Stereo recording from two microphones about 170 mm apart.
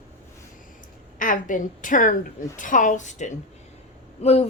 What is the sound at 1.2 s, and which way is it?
Speech, 50° left (ahead or behind).